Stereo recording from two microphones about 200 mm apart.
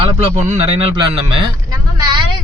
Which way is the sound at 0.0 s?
35° right (ahead or behind).